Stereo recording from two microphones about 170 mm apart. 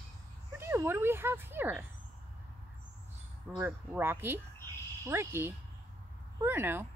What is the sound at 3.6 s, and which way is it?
Speech, 10° right (ahead or behind).